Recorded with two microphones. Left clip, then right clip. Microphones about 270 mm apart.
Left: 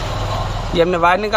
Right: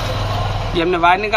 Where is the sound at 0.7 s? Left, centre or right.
Left.